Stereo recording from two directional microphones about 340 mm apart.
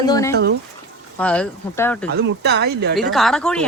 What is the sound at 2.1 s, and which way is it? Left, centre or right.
Speech, right.